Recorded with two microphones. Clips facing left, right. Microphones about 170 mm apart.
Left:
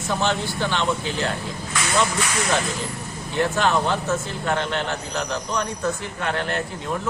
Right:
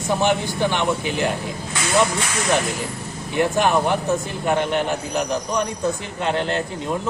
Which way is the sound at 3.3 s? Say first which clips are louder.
Right 3 dB; 15° right (ahead or behind).